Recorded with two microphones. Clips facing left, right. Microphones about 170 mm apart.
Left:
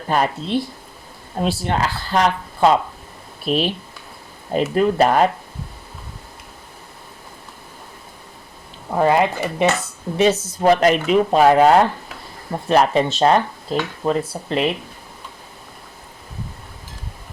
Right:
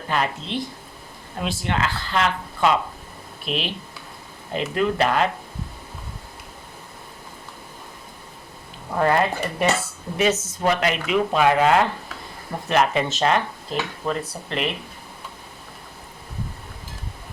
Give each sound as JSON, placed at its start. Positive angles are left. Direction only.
{"t": 0.1, "sound": "speech", "side_deg": 40}
{"t": 4.7, "sound": "speech", "side_deg": 40}
{"t": 9.0, "sound": "speech", "side_deg": 15}
{"t": 10.2, "sound": "speech", "side_deg": 30}
{"t": 14.0, "sound": "dishes", "side_deg": 25}